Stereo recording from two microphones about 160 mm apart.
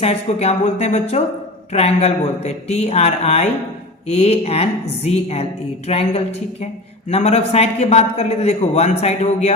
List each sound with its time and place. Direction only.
0.0 s a man's voice: 40° left (ahead or behind)